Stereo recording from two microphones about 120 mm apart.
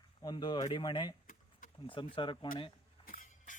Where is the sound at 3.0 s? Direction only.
90° left.